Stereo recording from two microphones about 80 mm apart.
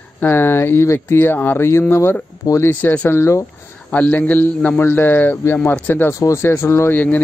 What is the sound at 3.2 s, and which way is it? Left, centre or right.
Speech, left.